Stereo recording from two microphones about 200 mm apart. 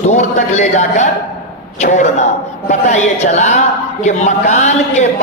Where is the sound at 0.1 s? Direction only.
35° left (ahead or behind).